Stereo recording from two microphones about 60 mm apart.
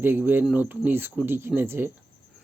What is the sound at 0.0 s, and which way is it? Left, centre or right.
Speech, right.